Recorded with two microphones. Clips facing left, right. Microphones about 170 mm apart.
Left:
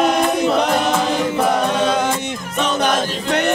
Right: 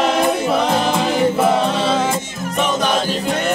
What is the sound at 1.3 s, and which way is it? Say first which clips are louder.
A capella: right 1 dB; 5° right (ahead or behind).